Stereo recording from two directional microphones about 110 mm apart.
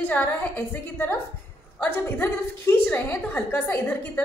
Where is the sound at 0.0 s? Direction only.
15° left (ahead or behind).